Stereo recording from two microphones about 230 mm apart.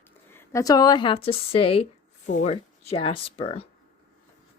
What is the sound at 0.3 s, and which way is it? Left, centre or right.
A woman's voice, centre.